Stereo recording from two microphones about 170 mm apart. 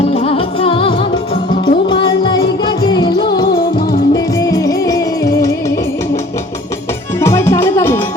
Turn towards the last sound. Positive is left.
turn(degrees=15)  # may be behind; listen again after turning